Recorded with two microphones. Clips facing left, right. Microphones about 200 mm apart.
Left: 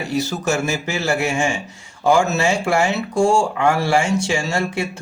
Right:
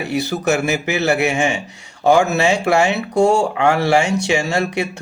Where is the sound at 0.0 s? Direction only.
65° right (ahead or behind).